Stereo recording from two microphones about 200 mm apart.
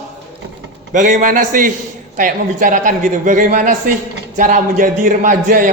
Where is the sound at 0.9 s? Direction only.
40° right (ahead or behind).